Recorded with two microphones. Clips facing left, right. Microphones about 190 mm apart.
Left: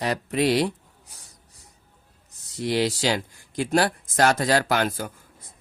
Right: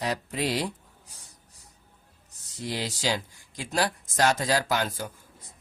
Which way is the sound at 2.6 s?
70° left (ahead or behind).